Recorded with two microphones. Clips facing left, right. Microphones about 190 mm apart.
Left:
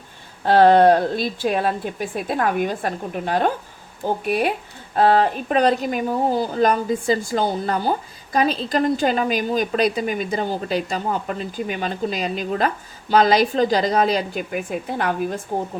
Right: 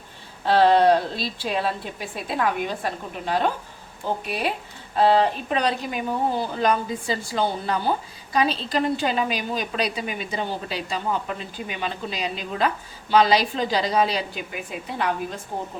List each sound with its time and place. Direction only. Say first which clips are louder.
0.4 s speech: left 4 dB; 50° left (ahead or behind)